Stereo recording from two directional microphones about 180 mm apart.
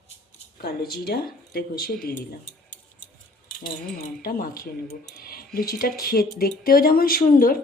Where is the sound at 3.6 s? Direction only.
50° left (ahead or behind).